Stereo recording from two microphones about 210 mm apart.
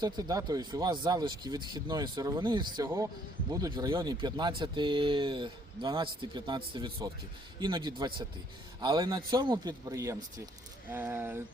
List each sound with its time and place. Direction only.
0.0 s a man's voice: 15° right (ahead or behind)